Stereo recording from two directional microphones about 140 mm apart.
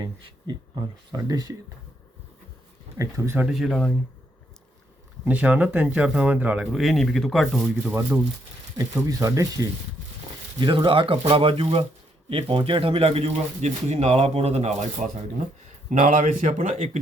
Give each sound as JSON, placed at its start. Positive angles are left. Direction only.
{"t": 0.0, "sound": "speech", "side_deg": -30}
{"t": 3.0, "sound": "speech", "side_deg": -20}
{"t": 3.4, "sound": "speech", "side_deg": 0}
{"t": 5.2, "sound": "speech", "side_deg": -10}
{"t": 7.9, "sound": "speech", "side_deg": -20}
{"t": 10.6, "sound": "speech", "side_deg": -35}